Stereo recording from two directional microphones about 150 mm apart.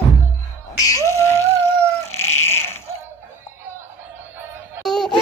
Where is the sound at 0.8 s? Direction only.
20° left (ahead or behind).